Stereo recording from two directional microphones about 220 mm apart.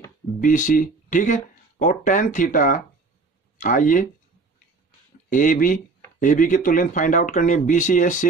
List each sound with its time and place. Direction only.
0.4 s speech: 35° left (ahead or behind)
5.3 s speech: 35° left (ahead or behind)